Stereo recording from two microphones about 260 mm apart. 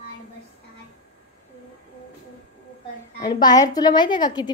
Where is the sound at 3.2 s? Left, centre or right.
Centre.